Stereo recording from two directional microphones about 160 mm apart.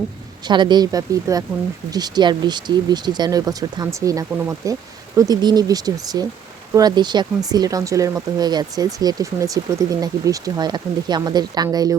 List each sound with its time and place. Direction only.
0.4 s speech: 30° right (ahead or behind)